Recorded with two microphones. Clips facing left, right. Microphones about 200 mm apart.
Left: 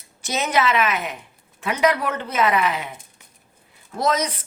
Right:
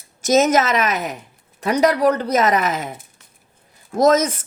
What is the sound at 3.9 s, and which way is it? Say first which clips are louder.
Speech: right 7 dB; 45° right (ahead or behind).